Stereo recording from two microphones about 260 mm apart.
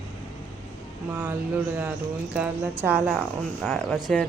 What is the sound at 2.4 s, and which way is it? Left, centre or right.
Mantra, centre.